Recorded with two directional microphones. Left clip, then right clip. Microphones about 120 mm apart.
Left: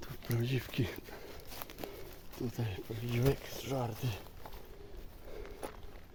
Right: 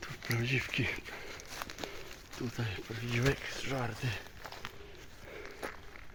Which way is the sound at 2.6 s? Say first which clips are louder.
Right 2 dB; 25° left (ahead or behind).